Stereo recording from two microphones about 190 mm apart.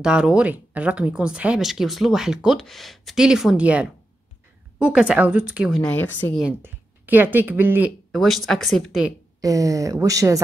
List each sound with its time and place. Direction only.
0.0 s speech: 5° right (ahead or behind)
5.8 s speech: 5° left (ahead or behind)
6.4 s speech: 10° right (ahead or behind)
8.1 s speech: centre (ahead or behind)
9.4 s speech: 15° right (ahead or behind)